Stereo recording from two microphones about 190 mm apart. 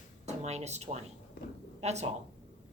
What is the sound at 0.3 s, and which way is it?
A woman's voice, 35° right (ahead or behind).